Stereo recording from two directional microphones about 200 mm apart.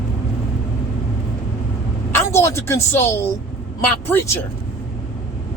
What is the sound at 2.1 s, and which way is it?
A woman's voice, 15° left (ahead or behind).